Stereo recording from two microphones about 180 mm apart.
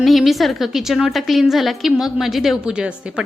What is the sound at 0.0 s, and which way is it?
A woman's voice, centre (ahead or behind).